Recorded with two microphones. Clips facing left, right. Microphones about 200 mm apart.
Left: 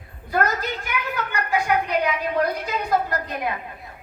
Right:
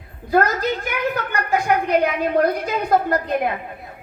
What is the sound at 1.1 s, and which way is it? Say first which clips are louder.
A woman's voice: right 3 dB; 45° right (ahead or behind).